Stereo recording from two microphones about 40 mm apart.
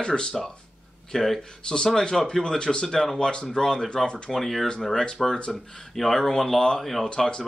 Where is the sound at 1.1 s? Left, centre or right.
Centre.